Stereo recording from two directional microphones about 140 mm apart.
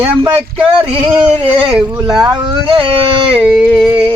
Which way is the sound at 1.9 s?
30° right (ahead or behind).